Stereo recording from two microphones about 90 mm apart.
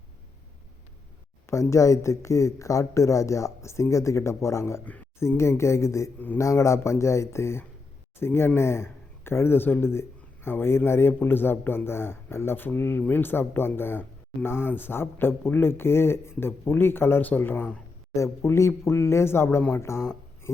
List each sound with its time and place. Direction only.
1.5 s speech: 35° left (ahead or behind)
6.1 s speech: 20° left (ahead or behind)
6.4 s speech: 35° left (ahead or behind)
18.1 s speech: 35° left (ahead or behind)